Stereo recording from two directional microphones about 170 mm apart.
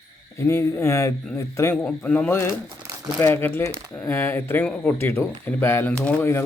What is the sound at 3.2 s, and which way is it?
Speech, 15° left (ahead or behind).